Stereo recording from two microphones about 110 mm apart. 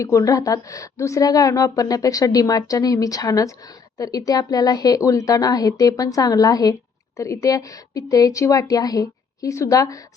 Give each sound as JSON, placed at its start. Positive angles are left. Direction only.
{"t": 0.0, "sound": "a woman's voice", "side_deg": 30}